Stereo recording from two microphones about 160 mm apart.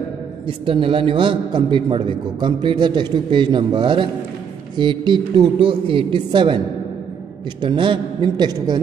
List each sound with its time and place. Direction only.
0.5 s a man's voice: 35° right (ahead or behind)
7.6 s a woman's voice: 30° right (ahead or behind)